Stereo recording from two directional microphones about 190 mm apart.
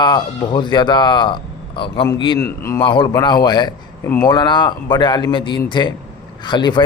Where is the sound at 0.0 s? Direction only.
25° left (ahead or behind).